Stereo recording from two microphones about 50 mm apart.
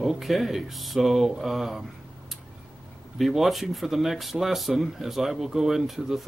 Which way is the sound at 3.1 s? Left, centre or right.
Centre.